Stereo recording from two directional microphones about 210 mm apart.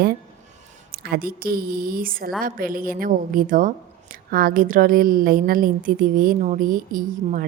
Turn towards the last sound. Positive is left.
turn(degrees=-40)  # may be behind; listen again after turning